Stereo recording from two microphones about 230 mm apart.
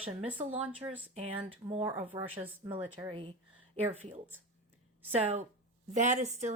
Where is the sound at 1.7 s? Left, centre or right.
Right.